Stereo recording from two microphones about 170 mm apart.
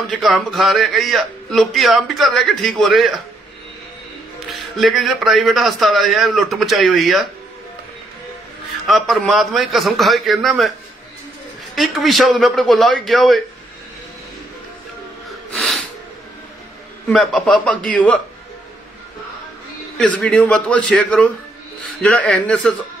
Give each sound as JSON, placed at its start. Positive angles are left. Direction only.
{"t": 0.1, "sound": "a man's voice", "side_deg": 0}
{"t": 4.5, "sound": "a man's voice", "side_deg": 0}
{"t": 8.8, "sound": "a man's voice", "side_deg": 0}
{"t": 11.7, "sound": "a man's voice", "side_deg": 0}
{"t": 17.1, "sound": "a man's voice", "side_deg": 0}
{"t": 20.0, "sound": "a man's voice", "side_deg": 5}